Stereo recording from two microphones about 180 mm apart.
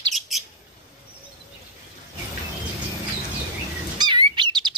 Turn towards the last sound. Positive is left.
turn(degrees=-25)  # may be behind; listen again after turning